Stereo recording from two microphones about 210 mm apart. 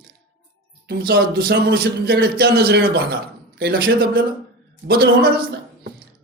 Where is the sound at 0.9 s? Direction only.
50° right (ahead or behind).